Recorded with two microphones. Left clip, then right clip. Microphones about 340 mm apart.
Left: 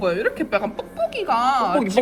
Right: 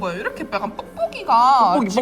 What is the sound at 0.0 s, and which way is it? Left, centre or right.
A man's voice, centre.